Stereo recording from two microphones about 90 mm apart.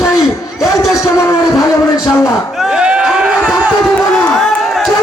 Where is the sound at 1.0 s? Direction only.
35° left (ahead or behind).